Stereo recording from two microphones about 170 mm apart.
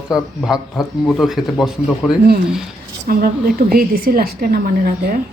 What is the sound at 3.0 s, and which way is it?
A woman's voice, 60° right (ahead or behind).